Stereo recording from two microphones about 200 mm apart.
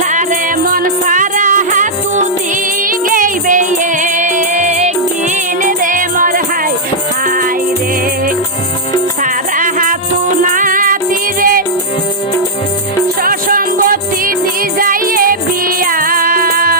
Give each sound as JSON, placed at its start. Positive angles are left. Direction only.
{"t": 0.1, "sound": "music", "side_deg": -40}
{"t": 9.2, "sound": "music", "side_deg": -40}
{"t": 13.2, "sound": "music", "side_deg": -45}